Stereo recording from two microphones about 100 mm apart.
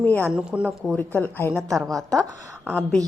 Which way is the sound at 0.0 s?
20° left (ahead or behind).